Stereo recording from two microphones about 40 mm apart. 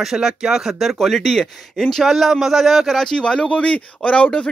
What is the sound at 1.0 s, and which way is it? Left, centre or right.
Speech, centre.